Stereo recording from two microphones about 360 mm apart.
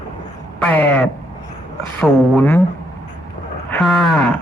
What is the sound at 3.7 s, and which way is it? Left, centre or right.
Cattle, centre.